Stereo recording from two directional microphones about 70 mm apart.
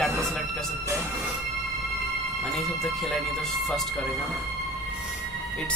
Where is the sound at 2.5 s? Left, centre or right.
Centre.